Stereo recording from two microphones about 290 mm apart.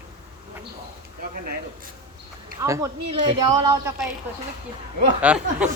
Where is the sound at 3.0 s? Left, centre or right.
Right.